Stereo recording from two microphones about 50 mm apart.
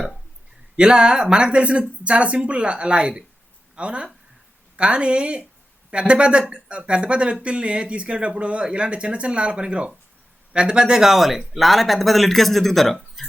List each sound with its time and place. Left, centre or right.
0.8 s speech: centre